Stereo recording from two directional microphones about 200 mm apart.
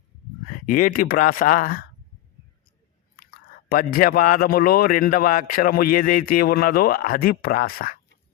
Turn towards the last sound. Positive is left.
turn(degrees=45)  # may be behind; listen again after turning